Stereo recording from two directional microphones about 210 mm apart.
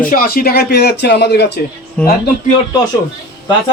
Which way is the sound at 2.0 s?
5° left (ahead or behind).